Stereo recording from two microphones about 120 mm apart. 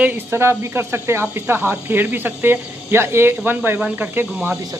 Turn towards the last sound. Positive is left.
turn(degrees=-15)  # may be behind; listen again after turning